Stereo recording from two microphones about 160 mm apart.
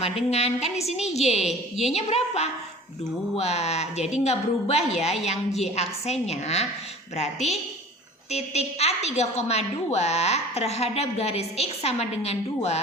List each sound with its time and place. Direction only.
0.3 s a woman's voice: 40° left (ahead or behind)